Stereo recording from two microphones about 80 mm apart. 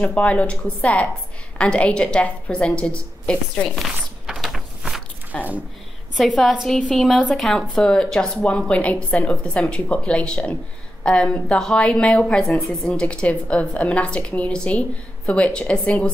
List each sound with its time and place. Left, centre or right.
0.0 s a woman's voice: centre
3.6 s a sound: centre
6.1 s a woman's voice: centre
13.0 s a woman's voice: centre